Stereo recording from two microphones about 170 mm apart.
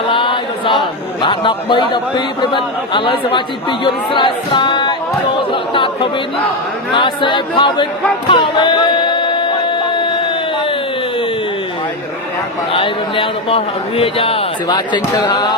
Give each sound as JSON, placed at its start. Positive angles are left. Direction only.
{"t": 0.1, "sound": "a man's voice", "side_deg": 30}
{"t": 5.5, "sound": "chatter", "side_deg": 30}
{"t": 6.9, "sound": "a man's voice", "side_deg": 30}
{"t": 8.3, "sound": "a sound", "side_deg": 30}
{"t": 12.7, "sound": "a man's voice", "side_deg": 30}